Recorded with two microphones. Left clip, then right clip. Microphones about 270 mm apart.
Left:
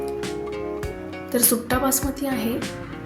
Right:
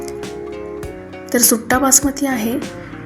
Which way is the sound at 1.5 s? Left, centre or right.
Left.